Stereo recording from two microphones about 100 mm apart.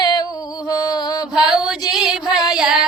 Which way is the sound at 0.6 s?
45° left (ahead or behind).